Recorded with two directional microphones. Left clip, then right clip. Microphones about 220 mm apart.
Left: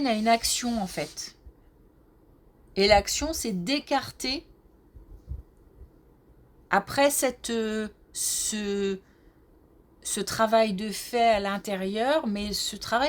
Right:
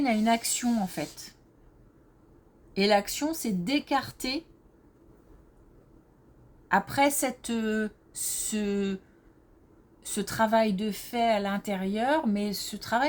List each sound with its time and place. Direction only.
0.0 s speech: 35° left (ahead or behind)
2.7 s speech: 35° left (ahead or behind)
6.7 s speech: 35° left (ahead or behind)
10.0 s speech: 35° left (ahead or behind)